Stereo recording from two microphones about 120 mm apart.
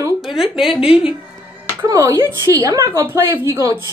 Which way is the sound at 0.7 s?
5° right (ahead or behind).